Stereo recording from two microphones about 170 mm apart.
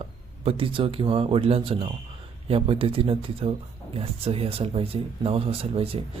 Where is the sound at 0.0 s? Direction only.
35° right (ahead or behind).